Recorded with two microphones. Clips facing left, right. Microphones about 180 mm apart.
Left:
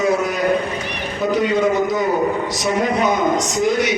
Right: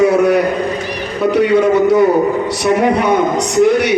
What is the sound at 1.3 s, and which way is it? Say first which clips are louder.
A man's voice: right 6 dB; 65° right (ahead or behind).